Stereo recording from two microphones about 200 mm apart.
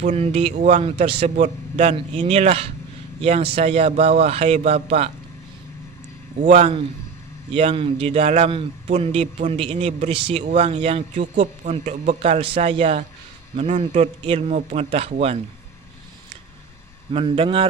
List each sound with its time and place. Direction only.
0.0 s speech: 30° right (ahead or behind)
0.6 s a man's voice: 40° right (ahead or behind)
6.4 s a man's voice: 35° right (ahead or behind)
17.1 s speech: 25° right (ahead or behind)